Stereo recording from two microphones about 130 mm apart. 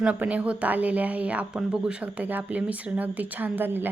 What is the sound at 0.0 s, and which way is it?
A woman's voice, 10° right (ahead or behind).